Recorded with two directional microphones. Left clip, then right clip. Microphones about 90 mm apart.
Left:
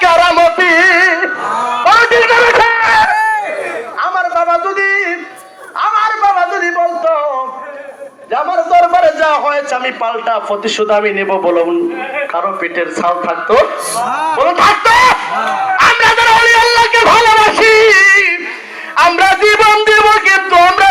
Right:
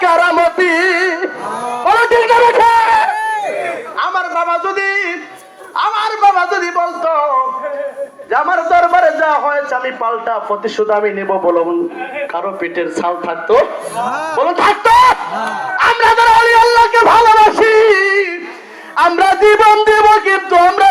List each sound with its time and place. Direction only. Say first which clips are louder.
0.0 s music: left 3 dB; 40° right (ahead or behind)
0.6 s music: left 5 dB; 60° right (ahead or behind)
1.9 s a sound: left 2 dB; 60° right (ahead or behind)
3.1 s crowd: left 5 dB; 40° right (ahead or behind)
4.0 s a sound: left 3 dB; 60° right (ahead or behind); by 7.1 s 45° right (ahead or behind)
8.8 s a sound: left 1 dB; 45° right (ahead or behind)
10.8 s a man's voice: left 3 dB; 30° right (ahead or behind)
14.0 s speech: left 2 dB; 75° right (ahead or behind)
14.4 s snicker: left 2 dB; 50° right (ahead or behind)
17.6 s music: left 3 dB; 40° right (ahead or behind)
18.9 s wind instrument: left 2 dB; 35° right (ahead or behind)